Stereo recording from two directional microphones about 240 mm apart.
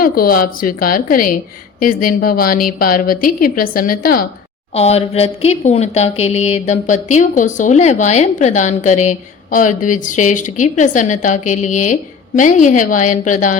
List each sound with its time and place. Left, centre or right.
0.0 s a woman's voice: left
4.7 s a woman's voice: left